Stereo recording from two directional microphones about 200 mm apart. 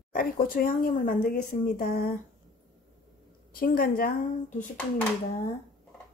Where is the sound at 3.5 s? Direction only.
45° left (ahead or behind).